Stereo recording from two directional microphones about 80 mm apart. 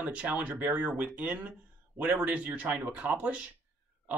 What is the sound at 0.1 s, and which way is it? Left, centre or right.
Speech, centre.